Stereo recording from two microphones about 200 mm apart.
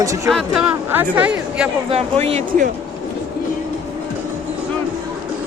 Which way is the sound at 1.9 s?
30° right (ahead or behind).